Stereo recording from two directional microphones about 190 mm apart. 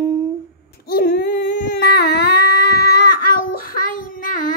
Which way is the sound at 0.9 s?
55° left (ahead or behind).